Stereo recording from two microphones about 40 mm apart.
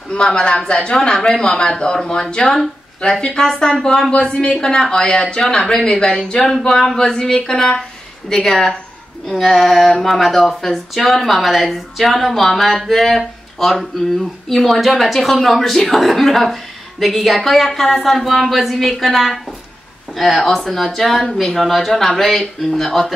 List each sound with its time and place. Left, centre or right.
0.1 s a man's voice: left
4.1 s a man's voice: left; by 19.4 s centre
20.4 s a woman's voice: centre